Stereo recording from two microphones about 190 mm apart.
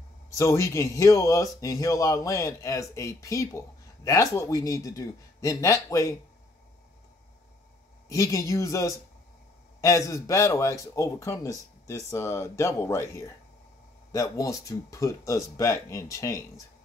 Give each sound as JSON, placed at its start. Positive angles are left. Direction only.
{"t": 0.3, "sound": "speech", "side_deg": 15}
{"t": 8.1, "sound": "speech", "side_deg": 15}
{"t": 14.1, "sound": "speech", "side_deg": 15}